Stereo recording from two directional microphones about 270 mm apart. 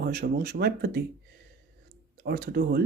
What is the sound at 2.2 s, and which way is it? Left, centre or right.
Speech, right.